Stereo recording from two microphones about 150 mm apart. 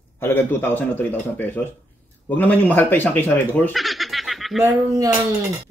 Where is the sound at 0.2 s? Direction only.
15° left (ahead or behind).